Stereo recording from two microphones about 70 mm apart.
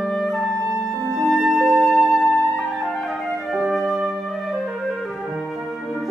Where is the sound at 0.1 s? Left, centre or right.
Centre.